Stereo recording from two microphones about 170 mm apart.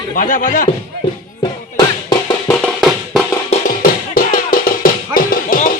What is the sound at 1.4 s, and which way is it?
Music, 25° left (ahead or behind).